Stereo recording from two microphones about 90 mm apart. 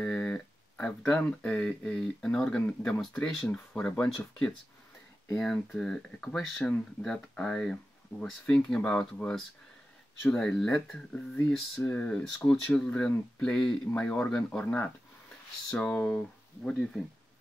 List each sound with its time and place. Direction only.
0.0 s speech: 10° left (ahead or behind)